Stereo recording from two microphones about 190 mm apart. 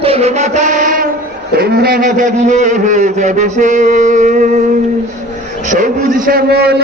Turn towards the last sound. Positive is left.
turn(degrees=-55)  # may be behind; listen again after turning